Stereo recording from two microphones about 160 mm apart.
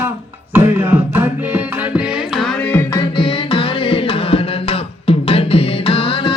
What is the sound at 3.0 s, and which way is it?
Music, 35° left (ahead or behind).